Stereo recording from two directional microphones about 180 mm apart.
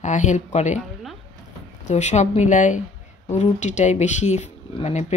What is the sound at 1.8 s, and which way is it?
Speech, 40° left (ahead or behind).